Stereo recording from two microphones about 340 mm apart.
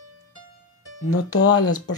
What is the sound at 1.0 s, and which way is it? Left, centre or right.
Speech, left.